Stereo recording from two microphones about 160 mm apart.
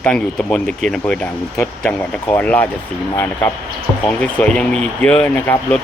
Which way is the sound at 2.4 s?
10° left (ahead or behind).